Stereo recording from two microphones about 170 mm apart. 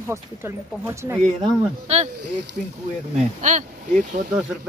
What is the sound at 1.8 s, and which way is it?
Speech, 40° right (ahead or behind).